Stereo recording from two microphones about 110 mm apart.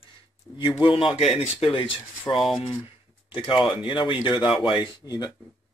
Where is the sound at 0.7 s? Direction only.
50° left (ahead or behind).